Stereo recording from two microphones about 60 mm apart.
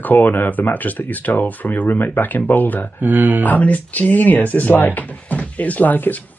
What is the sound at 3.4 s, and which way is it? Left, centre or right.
Speech, left.